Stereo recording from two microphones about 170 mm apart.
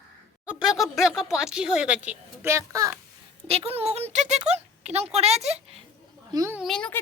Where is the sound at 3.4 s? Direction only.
35° right (ahead or behind).